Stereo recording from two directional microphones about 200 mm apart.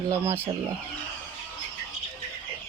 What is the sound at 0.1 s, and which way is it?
Speech, 10° right (ahead or behind).